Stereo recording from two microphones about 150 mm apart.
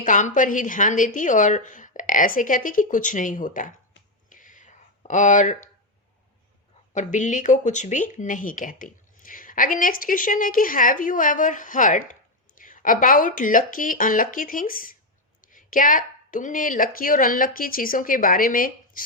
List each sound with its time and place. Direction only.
0.0 s speech: 55° left (ahead or behind)
4.3 s a sound: 60° left (ahead or behind)
6.9 s speech: 55° left (ahead or behind)